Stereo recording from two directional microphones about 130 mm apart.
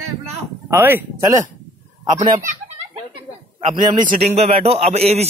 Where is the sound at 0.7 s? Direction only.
20° right (ahead or behind).